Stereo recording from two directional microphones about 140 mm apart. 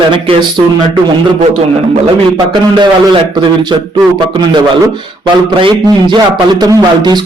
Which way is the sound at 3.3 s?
30° right (ahead or behind).